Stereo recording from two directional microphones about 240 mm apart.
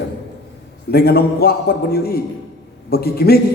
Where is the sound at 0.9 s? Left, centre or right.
Left.